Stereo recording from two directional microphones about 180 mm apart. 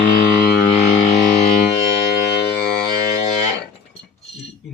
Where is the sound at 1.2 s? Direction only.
40° left (ahead or behind).